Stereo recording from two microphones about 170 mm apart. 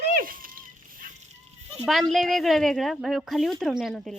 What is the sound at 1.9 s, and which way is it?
A woman's voice, centre (ahead or behind).